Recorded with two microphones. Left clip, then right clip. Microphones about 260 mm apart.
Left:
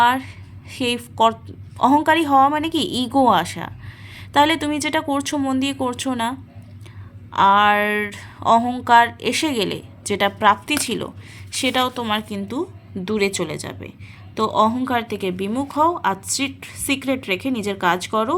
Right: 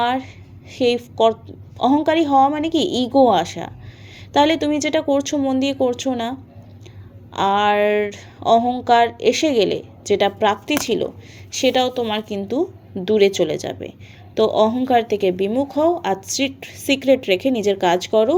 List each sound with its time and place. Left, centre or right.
0.0 s a woman's voice: left
7.3 s a woman's voice: centre